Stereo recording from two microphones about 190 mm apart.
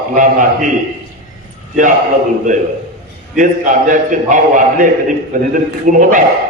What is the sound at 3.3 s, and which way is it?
A man's voice, 45° right (ahead or behind).